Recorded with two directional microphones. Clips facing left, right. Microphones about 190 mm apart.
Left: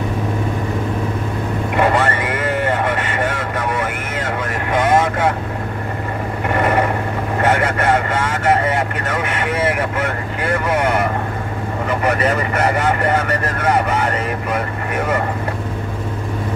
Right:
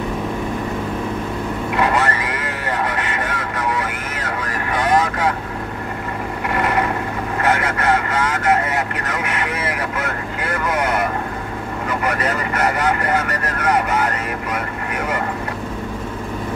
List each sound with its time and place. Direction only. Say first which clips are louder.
1.8 s vehicle: left 3 dB; 25° left (ahead or behind)
7.4 s vehicle: left 2 dB; 30° left (ahead or behind)